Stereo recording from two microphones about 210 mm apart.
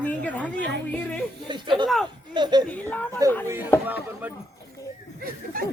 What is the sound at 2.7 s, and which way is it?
Speech, 5° left (ahead or behind).